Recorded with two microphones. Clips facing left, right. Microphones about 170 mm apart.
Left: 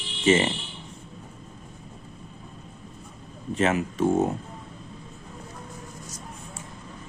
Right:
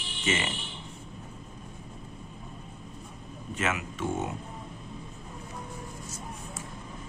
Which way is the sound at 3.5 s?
35° left (ahead or behind).